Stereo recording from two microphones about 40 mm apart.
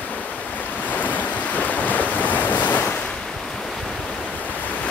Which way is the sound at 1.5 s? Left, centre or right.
Left.